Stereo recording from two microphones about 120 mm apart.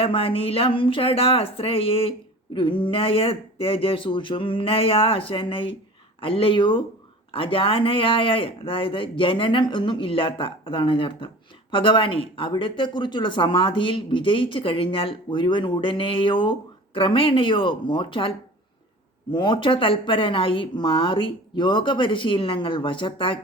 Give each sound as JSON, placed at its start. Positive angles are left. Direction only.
{"t": 0.0, "sound": "speech", "side_deg": 50}